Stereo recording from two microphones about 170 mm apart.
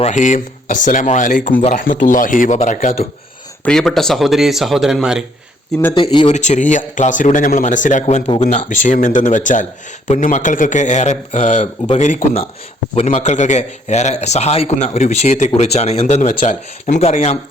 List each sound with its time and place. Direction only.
0.0 s speech: 45° left (ahead or behind)
3.6 s speech: 5° left (ahead or behind)
5.9 s speech: 30° left (ahead or behind)
6.2 s a man's voice: 45° left (ahead or behind)